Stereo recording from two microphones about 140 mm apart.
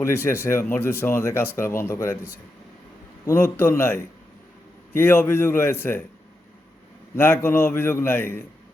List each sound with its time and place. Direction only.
0.0 s speech: 15° left (ahead or behind)
3.2 s speech: 20° left (ahead or behind)
7.2 s speech: 15° left (ahead or behind)